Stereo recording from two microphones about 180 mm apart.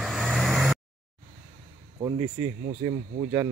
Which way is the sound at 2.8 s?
20° right (ahead or behind).